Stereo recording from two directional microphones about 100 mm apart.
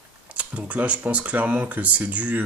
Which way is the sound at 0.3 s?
15° right (ahead or behind).